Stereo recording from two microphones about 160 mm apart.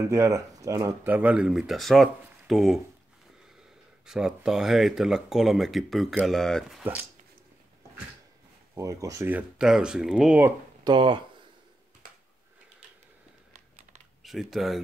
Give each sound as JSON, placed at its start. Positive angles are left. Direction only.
{"t": 0.1, "sound": "speech", "side_deg": -20}
{"t": 4.0, "sound": "speech", "side_deg": -5}
{"t": 6.8, "sound": "speech", "side_deg": -10}
{"t": 8.7, "sound": "speech", "side_deg": -20}
{"t": 9.6, "sound": "speech", "side_deg": -5}
{"t": 10.8, "sound": "speech", "side_deg": -30}
{"t": 13.5, "sound": "typing", "side_deg": -45}
{"t": 14.2, "sound": "speech", "side_deg": 0}